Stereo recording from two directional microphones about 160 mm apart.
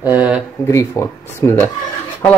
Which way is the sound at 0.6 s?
20° left (ahead or behind).